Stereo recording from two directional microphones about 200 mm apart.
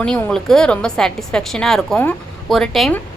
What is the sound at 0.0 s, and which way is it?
A woman's voice, 5° left (ahead or behind).